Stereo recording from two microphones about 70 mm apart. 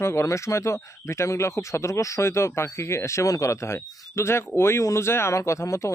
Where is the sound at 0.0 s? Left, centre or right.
Left.